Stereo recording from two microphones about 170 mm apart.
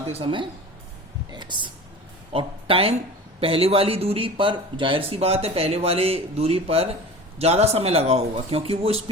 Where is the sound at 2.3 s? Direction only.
35° right (ahead or behind).